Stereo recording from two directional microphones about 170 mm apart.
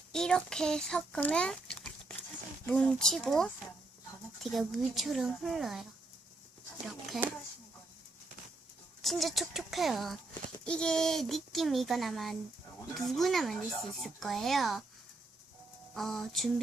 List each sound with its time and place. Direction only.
0.1 s speech: 5° left (ahead or behind)
7.1 s speech: centre (ahead or behind)
9.0 s speech: centre (ahead or behind)
16.0 s speech: centre (ahead or behind)